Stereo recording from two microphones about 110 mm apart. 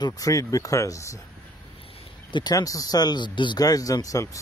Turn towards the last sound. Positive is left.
turn(degrees=30)  # may be behind; listen again after turning